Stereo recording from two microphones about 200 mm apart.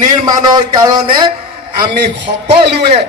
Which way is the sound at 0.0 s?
20° right (ahead or behind).